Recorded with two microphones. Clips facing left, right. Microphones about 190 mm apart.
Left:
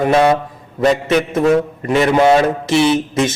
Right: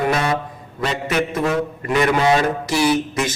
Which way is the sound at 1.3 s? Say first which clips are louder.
Left 7 dB; 25° left (ahead or behind).